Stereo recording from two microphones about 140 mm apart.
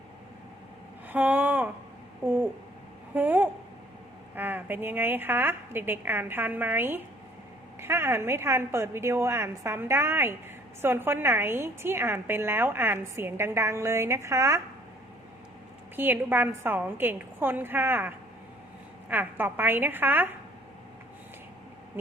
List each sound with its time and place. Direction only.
1.0 s a woman's voice: 10° right (ahead or behind)
16.0 s a woman's voice: 15° right (ahead or behind)